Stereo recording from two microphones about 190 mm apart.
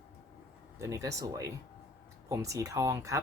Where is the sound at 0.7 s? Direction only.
15° right (ahead or behind).